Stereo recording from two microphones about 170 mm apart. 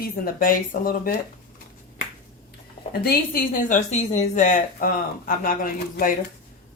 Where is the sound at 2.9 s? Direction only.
60° left (ahead or behind).